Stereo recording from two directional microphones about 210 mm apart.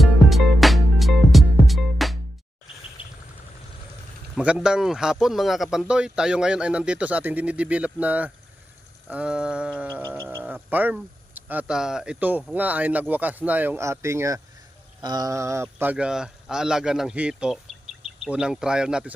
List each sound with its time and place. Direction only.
0.0 s music: centre (ahead or behind)
3.0 s a sound: 25° left (ahead or behind)
4.4 s speech: 5° right (ahead or behind)